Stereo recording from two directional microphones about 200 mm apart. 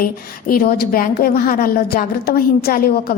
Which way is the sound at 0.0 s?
45° left (ahead or behind).